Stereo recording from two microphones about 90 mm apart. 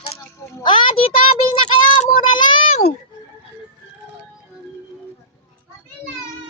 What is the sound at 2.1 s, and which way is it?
Child singing, 60° left (ahead or behind).